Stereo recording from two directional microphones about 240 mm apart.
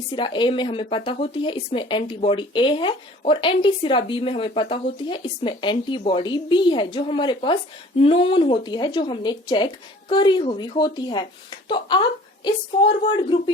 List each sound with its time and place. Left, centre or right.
0.1 s speech: centre